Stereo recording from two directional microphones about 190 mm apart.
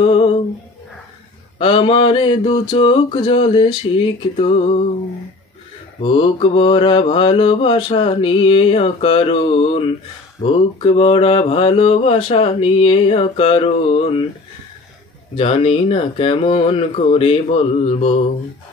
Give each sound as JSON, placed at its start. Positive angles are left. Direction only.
{"t": 0.0, "sound": "a sound", "side_deg": 30}
{"t": 1.6, "sound": "mantra", "side_deg": 30}
{"t": 5.9, "sound": "mantra", "side_deg": 25}
{"t": 15.3, "sound": "speech", "side_deg": 30}